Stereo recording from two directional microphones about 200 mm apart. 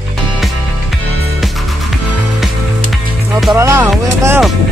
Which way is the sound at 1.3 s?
Centre (ahead or behind).